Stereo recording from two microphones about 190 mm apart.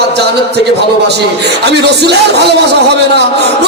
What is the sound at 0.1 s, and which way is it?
A man's voice, 60° right (ahead or behind).